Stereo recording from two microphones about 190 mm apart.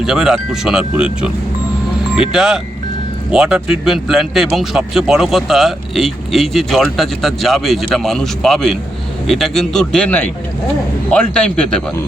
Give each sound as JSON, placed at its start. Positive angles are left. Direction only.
{"t": 0.0, "sound": "speech", "side_deg": 0}